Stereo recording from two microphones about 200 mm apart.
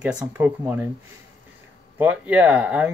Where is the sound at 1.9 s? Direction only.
10° right (ahead or behind).